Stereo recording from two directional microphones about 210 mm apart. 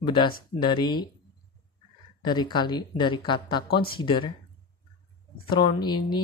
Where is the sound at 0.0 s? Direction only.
20° left (ahead or behind).